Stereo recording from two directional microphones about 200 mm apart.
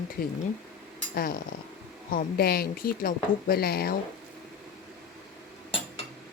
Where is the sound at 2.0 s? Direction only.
45° left (ahead or behind).